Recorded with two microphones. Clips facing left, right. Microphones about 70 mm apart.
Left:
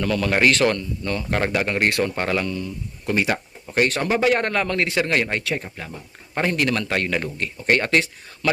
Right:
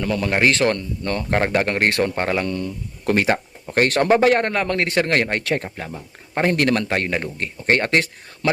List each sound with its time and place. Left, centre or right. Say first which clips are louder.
0.0 s a man's voice: even; centre
1.5 s a man's voice: right 1 dB; right
2.5 s speech: right 3 dB; right
3.2 s a sound: right 4 dB; right
3.8 s speech: right 3 dB; right
4.0 s a man's voice: right 4 dB; right
6.3 s a man's voice: right 3 dB; right
6.8 s a man's voice: right 1 dB; right